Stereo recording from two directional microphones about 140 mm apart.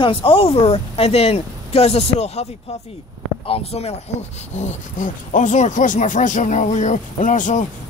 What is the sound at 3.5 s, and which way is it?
Speech, 45° left (ahead or behind).